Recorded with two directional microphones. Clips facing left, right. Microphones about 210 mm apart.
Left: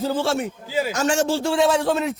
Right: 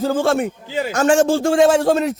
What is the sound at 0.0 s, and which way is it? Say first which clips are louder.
A man's voice: right 5 dB; 50° right (ahead or behind).